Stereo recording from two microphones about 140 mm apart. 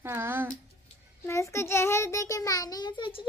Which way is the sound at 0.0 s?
15° right (ahead or behind).